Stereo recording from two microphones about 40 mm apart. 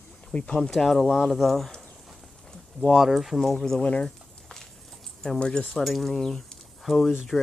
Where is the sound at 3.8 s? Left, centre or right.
Left.